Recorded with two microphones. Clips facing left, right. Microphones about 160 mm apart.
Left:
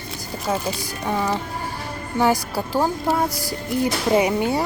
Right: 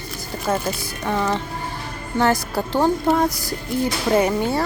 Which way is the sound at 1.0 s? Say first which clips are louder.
Right 1 dB; 10° left (ahead or behind).